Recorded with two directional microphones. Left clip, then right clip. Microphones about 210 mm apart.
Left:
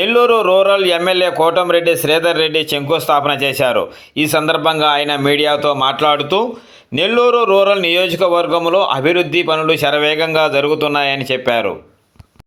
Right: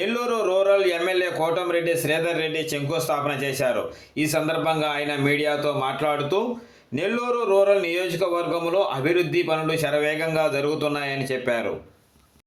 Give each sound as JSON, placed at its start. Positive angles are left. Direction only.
{"t": 0.0, "sound": "speech", "side_deg": 25}